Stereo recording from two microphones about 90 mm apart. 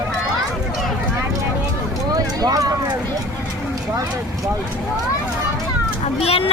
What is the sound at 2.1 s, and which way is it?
Speech, 45° right (ahead or behind).